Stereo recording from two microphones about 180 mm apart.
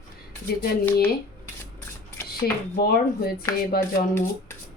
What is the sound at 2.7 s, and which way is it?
Speech, 55° left (ahead or behind).